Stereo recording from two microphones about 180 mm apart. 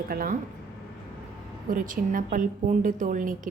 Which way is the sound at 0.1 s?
50° right (ahead or behind).